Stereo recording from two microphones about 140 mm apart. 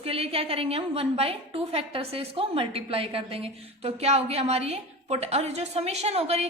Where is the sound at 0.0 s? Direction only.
45° right (ahead or behind).